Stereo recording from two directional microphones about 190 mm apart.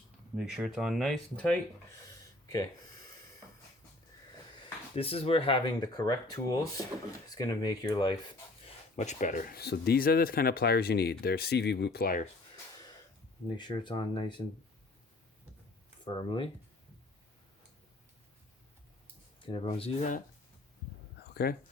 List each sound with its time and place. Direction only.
0.3 s speech: centre (ahead or behind)
4.9 s speech: 30° left (ahead or behind)
9.0 s speech: 40° left (ahead or behind)
13.6 s speech: 25° left (ahead or behind)
16.0 s speech: 25° left (ahead or behind)
19.5 s speech: 25° left (ahead or behind)
21.4 s speech: 60° left (ahead or behind)